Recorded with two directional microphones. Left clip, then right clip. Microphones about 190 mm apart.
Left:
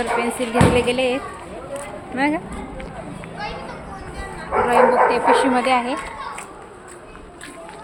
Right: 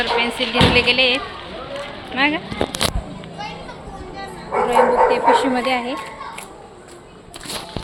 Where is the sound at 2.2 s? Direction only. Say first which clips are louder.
Right 3 dB; 25° left (ahead or behind).